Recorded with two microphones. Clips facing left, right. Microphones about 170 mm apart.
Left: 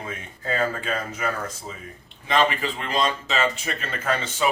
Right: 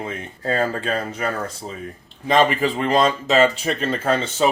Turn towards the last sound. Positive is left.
turn(degrees=-30)  # may be behind; listen again after turning